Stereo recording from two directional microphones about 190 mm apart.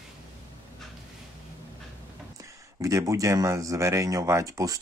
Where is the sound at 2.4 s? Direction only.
15° right (ahead or behind).